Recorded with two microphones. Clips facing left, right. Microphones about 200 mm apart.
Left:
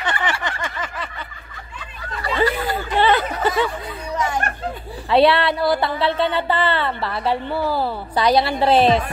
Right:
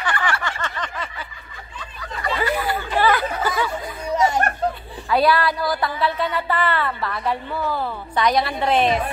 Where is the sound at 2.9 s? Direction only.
25° left (ahead or behind).